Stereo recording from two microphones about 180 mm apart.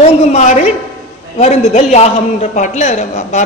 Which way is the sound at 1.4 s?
35° left (ahead or behind).